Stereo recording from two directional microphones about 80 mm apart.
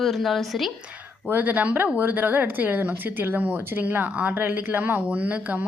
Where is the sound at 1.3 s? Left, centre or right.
Right.